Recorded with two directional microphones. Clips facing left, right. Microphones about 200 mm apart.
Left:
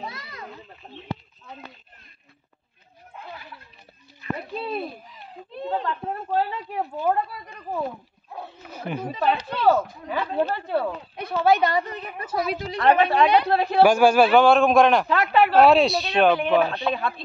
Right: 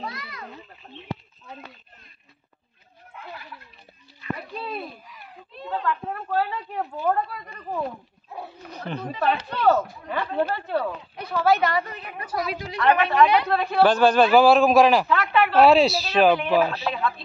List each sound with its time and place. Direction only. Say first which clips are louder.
0.0 s a sound: right 1 dB; 25° left (ahead or behind)
4.4 s a sound: left 3 dB; 25° left (ahead or behind)
6.7 s speech: left 1 dB; 10° left (ahead or behind)
11.3 s a woman's voice: left 1 dB; 20° left (ahead or behind)
13.8 s speech: left 1 dB; 10° left (ahead or behind)
14.3 s speech: right 1 dB; centre (ahead or behind)
15.0 s speech: left 2 dB; 35° left (ahead or behind)
15.5 s speech: right 1 dB; centre (ahead or behind)